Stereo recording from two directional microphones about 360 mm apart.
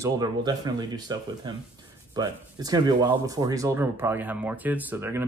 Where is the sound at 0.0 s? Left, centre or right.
Centre.